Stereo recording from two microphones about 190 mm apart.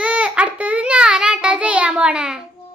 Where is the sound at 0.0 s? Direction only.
5° right (ahead or behind).